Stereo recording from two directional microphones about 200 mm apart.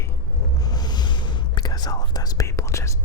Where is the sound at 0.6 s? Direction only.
20° left (ahead or behind).